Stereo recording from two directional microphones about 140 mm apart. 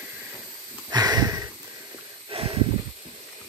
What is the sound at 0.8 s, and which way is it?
Sniff, 30° right (ahead or behind).